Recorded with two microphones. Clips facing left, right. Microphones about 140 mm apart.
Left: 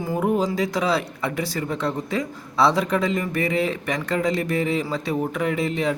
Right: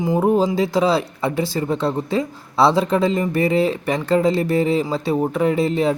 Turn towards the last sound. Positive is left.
turn(degrees=-35)  # may be behind; listen again after turning